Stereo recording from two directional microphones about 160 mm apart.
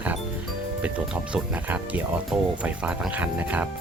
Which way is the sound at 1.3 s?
10° right (ahead or behind).